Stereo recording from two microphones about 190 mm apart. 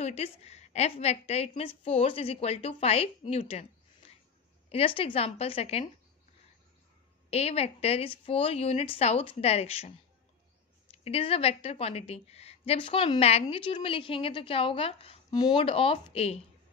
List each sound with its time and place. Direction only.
0.0 s a woman's voice: 35° left (ahead or behind)
7.2 s a woman's voice: 35° left (ahead or behind)
11.1 s a woman's voice: 30° left (ahead or behind)